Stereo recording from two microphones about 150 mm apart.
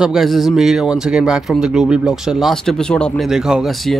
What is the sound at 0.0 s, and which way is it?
Speech, centre (ahead or behind).